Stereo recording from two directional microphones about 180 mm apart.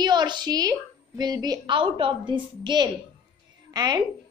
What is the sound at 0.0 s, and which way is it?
A woman's voice, 25° right (ahead or behind).